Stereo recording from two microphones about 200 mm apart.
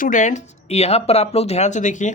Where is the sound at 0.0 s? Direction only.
40° left (ahead or behind).